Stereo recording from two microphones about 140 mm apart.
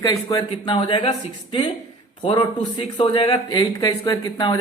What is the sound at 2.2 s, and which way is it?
Speech, 40° left (ahead or behind).